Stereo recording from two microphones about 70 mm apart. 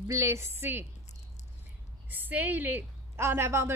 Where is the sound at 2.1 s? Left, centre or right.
Right.